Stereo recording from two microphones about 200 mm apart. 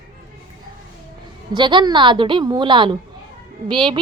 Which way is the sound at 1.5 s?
25° right (ahead or behind).